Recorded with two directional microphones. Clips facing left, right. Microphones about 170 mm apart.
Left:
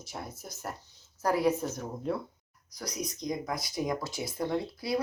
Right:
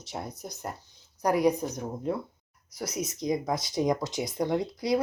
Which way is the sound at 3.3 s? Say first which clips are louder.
Right 7 dB; 25° right (ahead or behind).